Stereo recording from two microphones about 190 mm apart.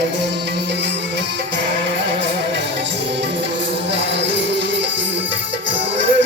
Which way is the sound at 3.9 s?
65° right (ahead or behind).